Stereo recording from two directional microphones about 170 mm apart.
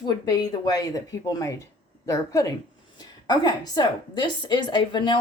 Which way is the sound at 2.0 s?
20° left (ahead or behind).